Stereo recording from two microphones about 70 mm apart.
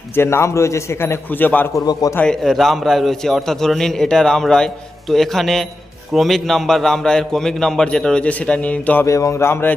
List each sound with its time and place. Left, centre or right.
0.2 s a man's voice: left
1.9 s a man's voice: left
2.2 s a man's voice: centre; by 9.0 s left
9.0 s a man's voice: left